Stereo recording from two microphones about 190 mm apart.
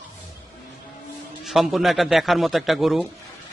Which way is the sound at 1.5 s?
Centre (ahead or behind).